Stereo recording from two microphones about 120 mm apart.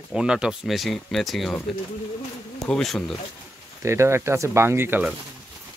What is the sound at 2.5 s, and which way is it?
Speech, 5° left (ahead or behind).